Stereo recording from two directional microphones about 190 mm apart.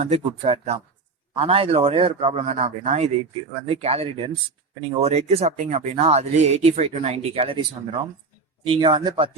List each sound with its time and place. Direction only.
0.0 s speech: 35° right (ahead or behind)
8.6 s speech: 25° right (ahead or behind)